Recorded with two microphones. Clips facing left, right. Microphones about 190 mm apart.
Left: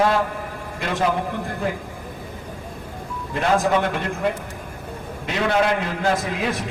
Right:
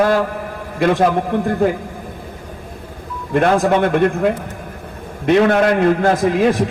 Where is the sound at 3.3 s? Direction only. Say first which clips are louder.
Right 5 dB; 55° right (ahead or behind).